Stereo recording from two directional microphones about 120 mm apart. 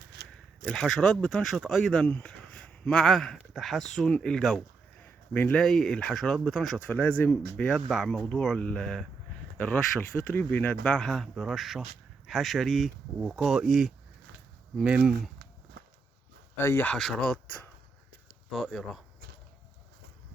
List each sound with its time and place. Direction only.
0.7 s speech: 5° left (ahead or behind)
6.8 s speech: 15° left (ahead or behind)
7.5 s speech: 5° left (ahead or behind)
16.6 s speech: 20° left (ahead or behind)
16.9 s speech: 5° left (ahead or behind)
18.5 s speech: centre (ahead or behind)